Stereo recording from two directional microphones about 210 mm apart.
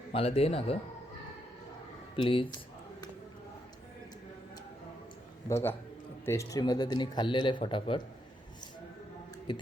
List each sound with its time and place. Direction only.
0.1 s speech: 30° left (ahead or behind)
2.1 s speech: 25° left (ahead or behind)
5.5 s a man's voice: 15° left (ahead or behind)